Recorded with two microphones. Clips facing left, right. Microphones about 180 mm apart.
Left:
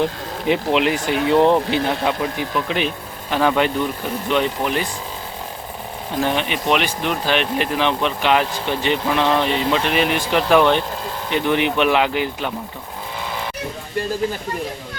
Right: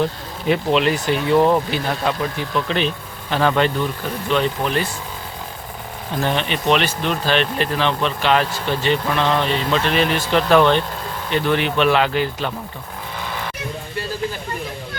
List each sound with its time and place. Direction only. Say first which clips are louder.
0.4 s speech: even; 15° left (ahead or behind)
6.2 s speech: right 1 dB; 15° left (ahead or behind)